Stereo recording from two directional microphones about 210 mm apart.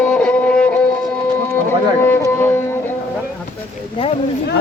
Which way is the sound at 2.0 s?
10° left (ahead or behind).